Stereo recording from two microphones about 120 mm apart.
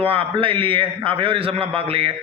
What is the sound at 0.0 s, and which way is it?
A man's voice, 50° right (ahead or behind).